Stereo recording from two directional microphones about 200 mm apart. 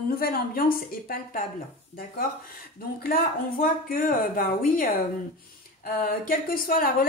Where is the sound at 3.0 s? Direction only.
45° left (ahead or behind).